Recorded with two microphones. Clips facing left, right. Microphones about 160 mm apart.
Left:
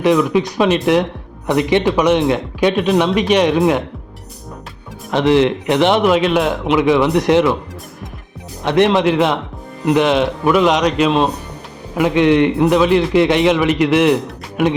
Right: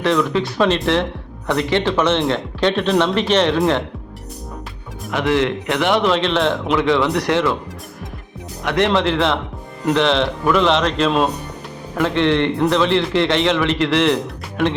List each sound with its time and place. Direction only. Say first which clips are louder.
0.0 s a man's voice: left 4 dB; 15° left (ahead or behind)
5.1 s a man's voice: left 5 dB; 20° left (ahead or behind)
6.1 s a man's voice: left 3 dB; 10° left (ahead or behind)
8.6 s a man's voice: left 4 dB; 20° left (ahead or behind)